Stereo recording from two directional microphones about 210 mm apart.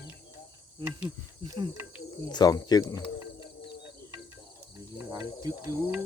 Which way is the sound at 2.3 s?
20° left (ahead or behind).